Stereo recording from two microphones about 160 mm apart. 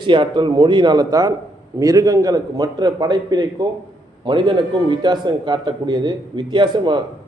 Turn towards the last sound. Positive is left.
turn(degrees=-30)  # may be behind; listen again after turning